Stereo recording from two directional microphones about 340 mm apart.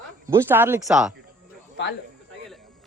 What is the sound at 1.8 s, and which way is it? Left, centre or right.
Speech, left.